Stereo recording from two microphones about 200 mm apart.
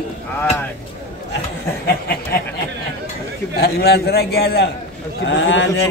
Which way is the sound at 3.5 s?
50° left (ahead or behind).